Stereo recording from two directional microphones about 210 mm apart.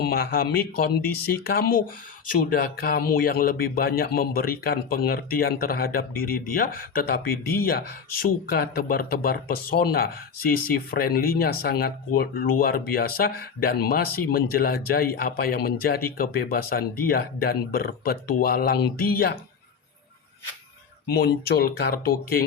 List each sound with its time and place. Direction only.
0.0 s speech: 45° left (ahead or behind)
21.1 s speech: 50° left (ahead or behind)